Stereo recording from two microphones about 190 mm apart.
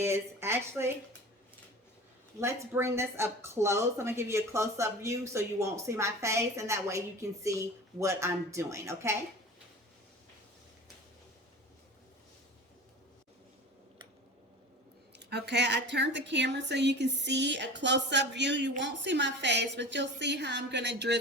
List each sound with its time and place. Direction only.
0.0 s speech: 15° right (ahead or behind)
2.4 s speech: 15° right (ahead or behind)
15.2 s speech: 60° right (ahead or behind)